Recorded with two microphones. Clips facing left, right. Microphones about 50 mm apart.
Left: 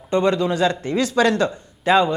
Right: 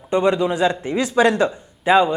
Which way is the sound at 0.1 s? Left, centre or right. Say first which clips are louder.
Right 1 dB; centre.